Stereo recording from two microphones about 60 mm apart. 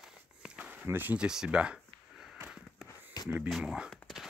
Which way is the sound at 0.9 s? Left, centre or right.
Right.